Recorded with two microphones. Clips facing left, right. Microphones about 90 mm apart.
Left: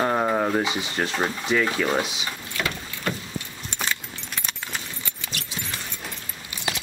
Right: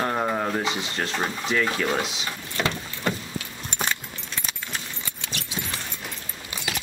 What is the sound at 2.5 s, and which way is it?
Vehicle, 20° right (ahead or behind).